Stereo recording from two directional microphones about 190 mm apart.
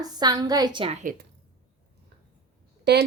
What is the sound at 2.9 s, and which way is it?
Speech, 65° right (ahead or behind).